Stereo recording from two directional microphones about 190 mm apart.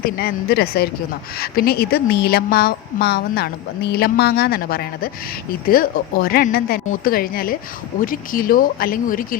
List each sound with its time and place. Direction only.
0.0 s a woman's voice: 50° left (ahead or behind)